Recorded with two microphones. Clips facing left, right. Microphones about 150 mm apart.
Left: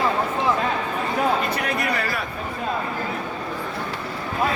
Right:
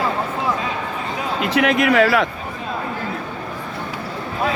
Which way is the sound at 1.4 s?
85° right.